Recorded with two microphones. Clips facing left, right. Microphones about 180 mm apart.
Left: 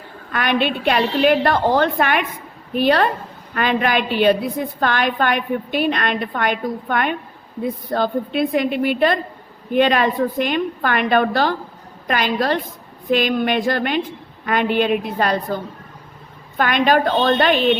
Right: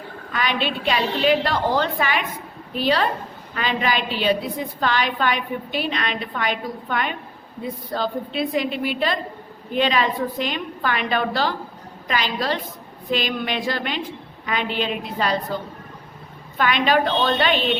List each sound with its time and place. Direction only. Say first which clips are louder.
0.3 s a woman's voice: left 5 dB; 55° left (ahead or behind)
16.6 s a woman's voice: left 3 dB; 50° left (ahead or behind)